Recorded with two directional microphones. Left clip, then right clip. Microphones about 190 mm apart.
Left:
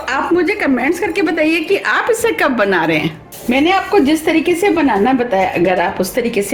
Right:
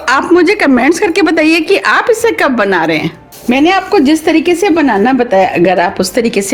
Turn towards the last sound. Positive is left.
turn(degrees=-60)  # may be behind; listen again after turning